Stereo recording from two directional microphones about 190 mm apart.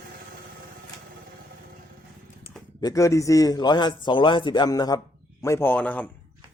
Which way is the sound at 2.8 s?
15° left (ahead or behind).